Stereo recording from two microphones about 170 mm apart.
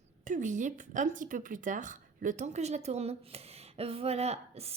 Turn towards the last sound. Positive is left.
turn(degrees=-35)  # may be behind; listen again after turning